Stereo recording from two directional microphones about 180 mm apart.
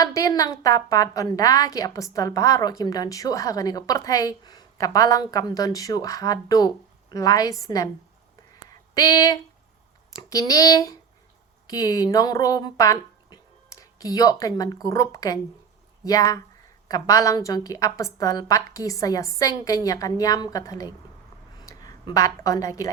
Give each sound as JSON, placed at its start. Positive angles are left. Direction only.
{"t": 0.0, "sound": "a woman's voice", "side_deg": 20}
{"t": 9.0, "sound": "a woman's voice", "side_deg": 20}